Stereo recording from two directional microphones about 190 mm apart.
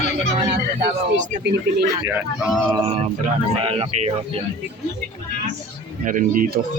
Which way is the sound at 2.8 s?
30° right (ahead or behind).